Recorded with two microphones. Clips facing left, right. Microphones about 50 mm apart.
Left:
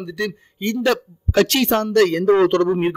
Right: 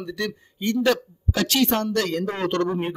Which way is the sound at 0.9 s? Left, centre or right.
Left.